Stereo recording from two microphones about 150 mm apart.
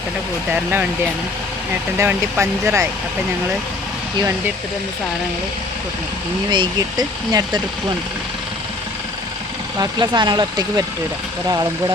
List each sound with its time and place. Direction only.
0.5 s speech: 10° right (ahead or behind)
2.0 s speech: 15° right (ahead or behind)
6.5 s speech: 30° right (ahead or behind)
9.7 s speech: 25° right (ahead or behind)